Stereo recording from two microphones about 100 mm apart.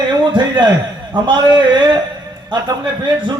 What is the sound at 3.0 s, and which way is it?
Speech, 50° right (ahead or behind).